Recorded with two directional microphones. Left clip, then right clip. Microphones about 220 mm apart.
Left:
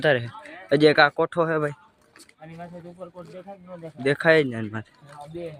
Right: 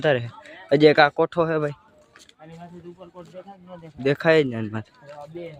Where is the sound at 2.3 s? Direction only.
20° left (ahead or behind).